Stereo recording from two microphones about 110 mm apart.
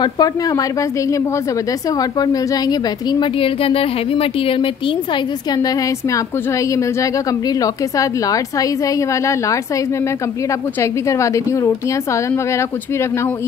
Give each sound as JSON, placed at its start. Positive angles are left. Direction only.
{"t": 0.0, "sound": "a woman's voice", "side_deg": 35}
{"t": 10.8, "sound": "a woman's voice", "side_deg": 25}